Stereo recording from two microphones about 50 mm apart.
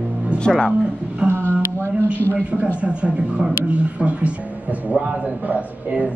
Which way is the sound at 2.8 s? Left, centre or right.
Right.